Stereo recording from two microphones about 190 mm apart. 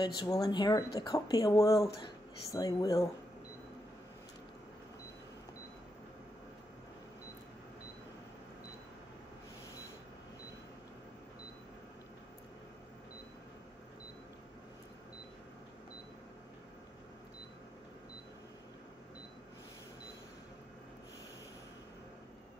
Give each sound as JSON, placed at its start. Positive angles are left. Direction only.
{"t": 0.0, "sound": "speech", "side_deg": 20}